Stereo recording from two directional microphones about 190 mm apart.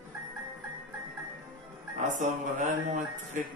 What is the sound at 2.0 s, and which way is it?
Speech, 40° right (ahead or behind).